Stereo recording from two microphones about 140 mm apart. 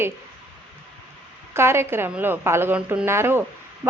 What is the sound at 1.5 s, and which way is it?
A woman's voice, 20° right (ahead or behind).